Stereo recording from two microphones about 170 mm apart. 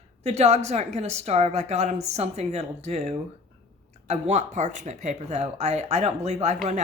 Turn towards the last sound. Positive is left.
turn(degrees=-40)  # may be behind; listen again after turning